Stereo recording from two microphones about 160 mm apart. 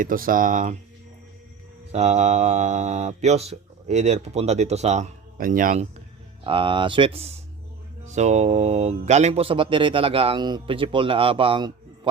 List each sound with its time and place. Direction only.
0.0 s speech: 60° right (ahead or behind)
1.9 s speech: 45° right (ahead or behind)
5.4 s speech: 60° right (ahead or behind)
6.4 s speech: 35° right (ahead or behind)